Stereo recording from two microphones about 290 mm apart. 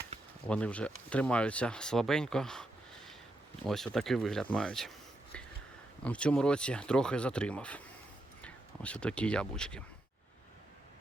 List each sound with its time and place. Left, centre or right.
0.1 s a sound: right
0.4 s speech: centre
6.1 s speech: centre